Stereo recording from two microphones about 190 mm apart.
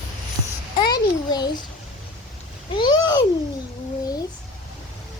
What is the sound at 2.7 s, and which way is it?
Speech, 25° left (ahead or behind).